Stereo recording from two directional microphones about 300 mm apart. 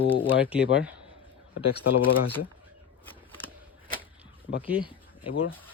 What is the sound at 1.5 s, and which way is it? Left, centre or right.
Speech, left.